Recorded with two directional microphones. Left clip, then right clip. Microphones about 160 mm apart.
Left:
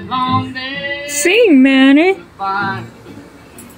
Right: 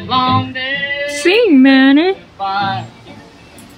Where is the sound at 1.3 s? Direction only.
Centre (ahead or behind).